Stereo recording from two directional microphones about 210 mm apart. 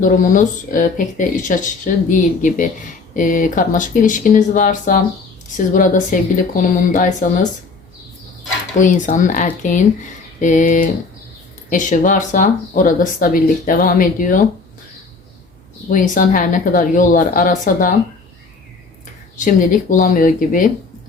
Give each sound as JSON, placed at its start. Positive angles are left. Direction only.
{"t": 0.0, "sound": "speech", "side_deg": 40}
{"t": 8.8, "sound": "speech", "side_deg": 35}
{"t": 15.9, "sound": "speech", "side_deg": 40}
{"t": 19.5, "sound": "speech", "side_deg": 40}